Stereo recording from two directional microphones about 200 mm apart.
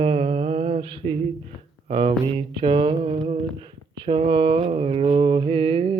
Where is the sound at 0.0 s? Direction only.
30° right (ahead or behind).